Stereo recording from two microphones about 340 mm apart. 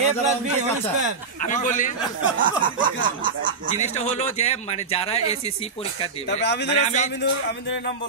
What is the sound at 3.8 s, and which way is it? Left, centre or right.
Speech, centre.